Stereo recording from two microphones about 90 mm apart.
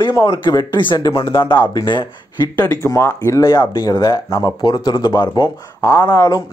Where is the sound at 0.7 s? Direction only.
65° left (ahead or behind).